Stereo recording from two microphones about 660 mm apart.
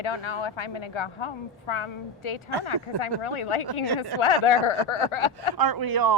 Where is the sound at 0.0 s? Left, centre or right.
Left.